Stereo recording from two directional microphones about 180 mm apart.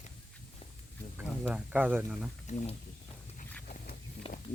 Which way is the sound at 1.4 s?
10° right (ahead or behind).